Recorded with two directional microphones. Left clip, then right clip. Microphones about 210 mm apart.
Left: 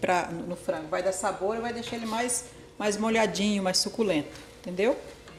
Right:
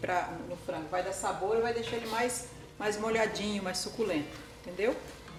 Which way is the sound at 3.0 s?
40° left (ahead or behind).